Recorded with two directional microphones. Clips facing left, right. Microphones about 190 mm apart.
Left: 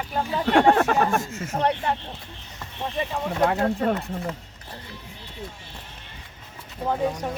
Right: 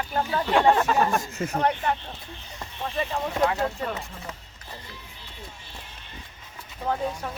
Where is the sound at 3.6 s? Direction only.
55° left (ahead or behind).